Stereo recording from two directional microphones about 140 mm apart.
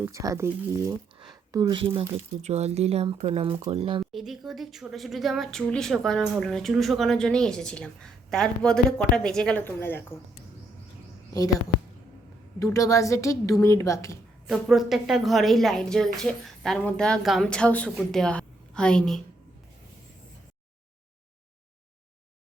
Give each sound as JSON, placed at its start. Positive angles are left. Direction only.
{"t": 0.0, "sound": "speech", "side_deg": -20}
{"t": 2.0, "sound": "speech", "side_deg": -50}
{"t": 4.1, "sound": "a woman's voice", "side_deg": 0}
{"t": 12.5, "sound": "a woman's voice", "side_deg": 25}
{"t": 14.4, "sound": "a woman's voice", "side_deg": 0}